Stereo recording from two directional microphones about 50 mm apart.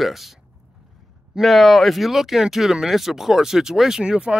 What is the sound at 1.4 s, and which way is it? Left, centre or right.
Speech, centre.